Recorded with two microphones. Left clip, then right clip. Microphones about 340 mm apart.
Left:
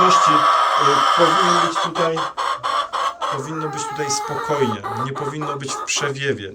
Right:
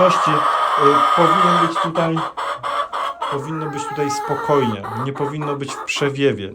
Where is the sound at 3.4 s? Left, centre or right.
Centre.